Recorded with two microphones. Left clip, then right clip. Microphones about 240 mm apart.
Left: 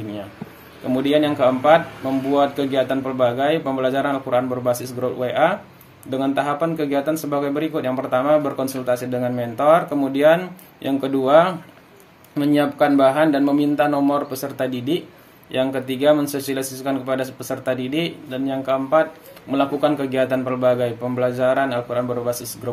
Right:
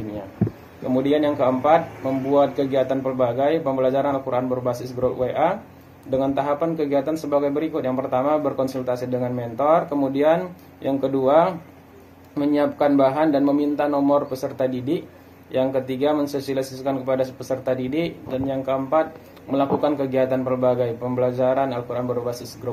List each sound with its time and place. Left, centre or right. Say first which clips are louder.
0.9 s a man's voice: left 1 dB; left